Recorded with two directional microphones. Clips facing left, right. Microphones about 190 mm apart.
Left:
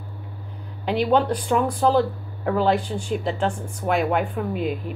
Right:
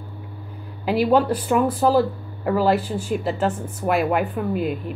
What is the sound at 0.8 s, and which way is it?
Speech, 5° right (ahead or behind).